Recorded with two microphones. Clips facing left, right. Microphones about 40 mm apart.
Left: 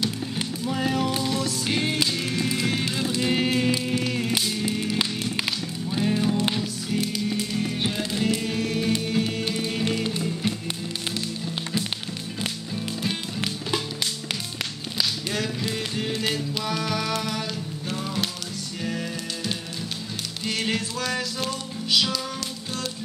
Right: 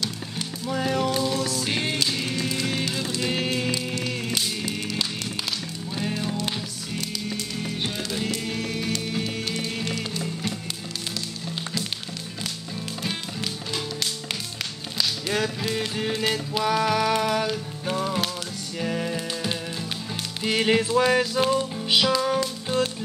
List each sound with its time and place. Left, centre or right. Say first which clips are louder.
0.0 s music: left 3 dB; centre
2.3 s music: left 1 dB; centre
15.2 s music: right 2 dB; centre; by 22.8 s right